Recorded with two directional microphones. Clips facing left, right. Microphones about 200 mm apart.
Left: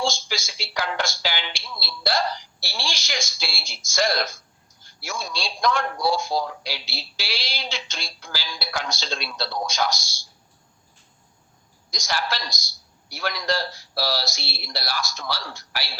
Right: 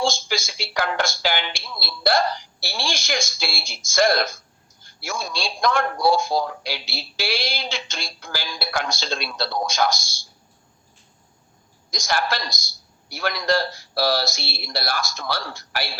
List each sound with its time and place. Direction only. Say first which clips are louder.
0.0 s a man's voice: right 3 dB; 55° right (ahead or behind)
11.9 s a man's voice: right 4 dB; 55° right (ahead or behind)